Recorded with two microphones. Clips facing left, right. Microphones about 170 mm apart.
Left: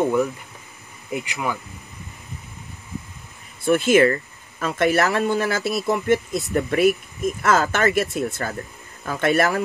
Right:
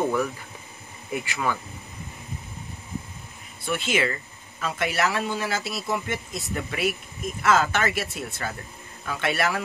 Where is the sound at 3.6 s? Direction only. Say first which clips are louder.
Left 10 dB; 50° left (ahead or behind).